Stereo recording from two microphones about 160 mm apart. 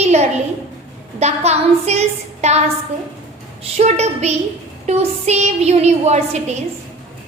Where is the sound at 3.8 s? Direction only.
45° right (ahead or behind).